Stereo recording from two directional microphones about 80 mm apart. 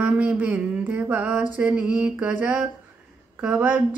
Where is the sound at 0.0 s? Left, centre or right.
Centre.